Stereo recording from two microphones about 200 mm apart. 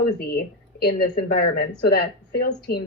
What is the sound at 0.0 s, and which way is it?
A woman's voice, 50° left (ahead or behind).